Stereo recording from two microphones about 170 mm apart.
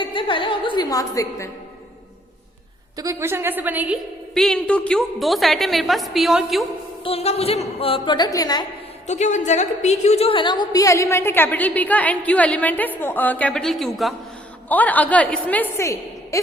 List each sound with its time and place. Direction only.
0.0 s a woman's voice: 30° left (ahead or behind)
3.0 s a woman's voice: 15° right (ahead or behind)
4.4 s a woman's voice: 5° left (ahead or behind)
7.0 s a woman's voice: 35° left (ahead or behind)
9.0 s a woman's voice: 45° left (ahead or behind); by 16.4 s 15° left (ahead or behind)